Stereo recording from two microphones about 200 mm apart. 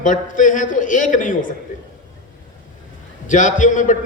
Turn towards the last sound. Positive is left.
turn(degrees=40)  # may be behind; listen again after turning